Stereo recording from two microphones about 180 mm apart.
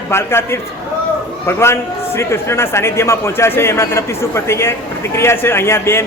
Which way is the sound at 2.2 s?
15° left (ahead or behind).